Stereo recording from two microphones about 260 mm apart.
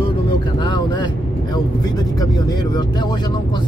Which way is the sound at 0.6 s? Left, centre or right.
Centre.